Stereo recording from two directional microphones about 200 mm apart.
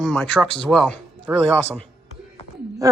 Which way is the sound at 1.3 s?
10° right (ahead or behind).